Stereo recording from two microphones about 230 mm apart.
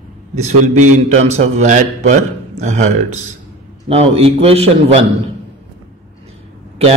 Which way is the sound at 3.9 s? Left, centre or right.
Right.